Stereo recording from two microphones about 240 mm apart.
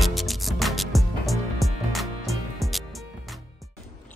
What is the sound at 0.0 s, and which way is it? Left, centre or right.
Music, centre.